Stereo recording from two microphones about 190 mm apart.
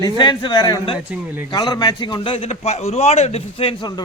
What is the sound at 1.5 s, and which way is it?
A man's voice, 20° left (ahead or behind).